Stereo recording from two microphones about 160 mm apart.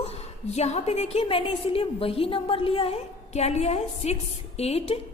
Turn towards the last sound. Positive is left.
turn(degrees=40)  # may be behind; listen again after turning